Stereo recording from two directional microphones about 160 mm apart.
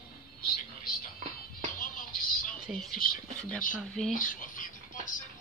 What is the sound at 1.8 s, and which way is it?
Music, 60° left (ahead or behind).